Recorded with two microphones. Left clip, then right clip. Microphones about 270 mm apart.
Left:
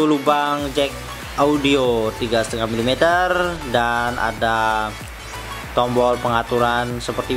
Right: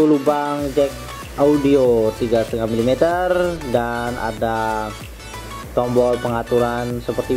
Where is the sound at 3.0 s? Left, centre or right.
Centre.